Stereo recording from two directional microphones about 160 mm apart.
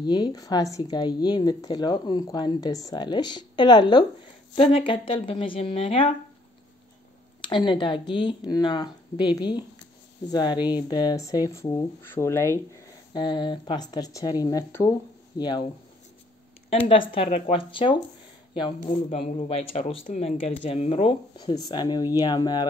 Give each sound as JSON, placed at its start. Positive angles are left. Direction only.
{"t": 0.0, "sound": "speech", "side_deg": 25}
{"t": 7.4, "sound": "speech", "side_deg": 30}
{"t": 16.7, "sound": "speech", "side_deg": 35}
{"t": 19.0, "sound": "speech", "side_deg": 40}